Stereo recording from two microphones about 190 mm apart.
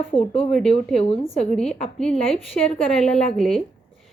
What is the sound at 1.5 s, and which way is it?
A woman's voice, 5° left (ahead or behind).